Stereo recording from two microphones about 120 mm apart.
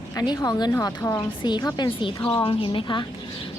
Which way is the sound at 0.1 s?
30° left (ahead or behind).